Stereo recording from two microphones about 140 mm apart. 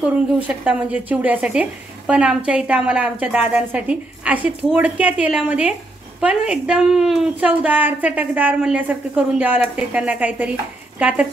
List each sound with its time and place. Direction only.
0.4 s a woman's voice: 10° right (ahead or behind)